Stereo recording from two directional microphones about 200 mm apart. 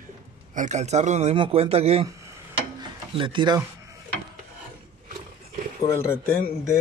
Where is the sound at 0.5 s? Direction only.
35° right (ahead or behind).